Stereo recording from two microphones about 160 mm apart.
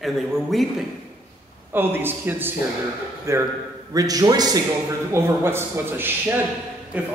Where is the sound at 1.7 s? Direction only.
15° right (ahead or behind).